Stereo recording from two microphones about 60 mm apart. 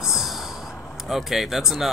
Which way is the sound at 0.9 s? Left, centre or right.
Centre.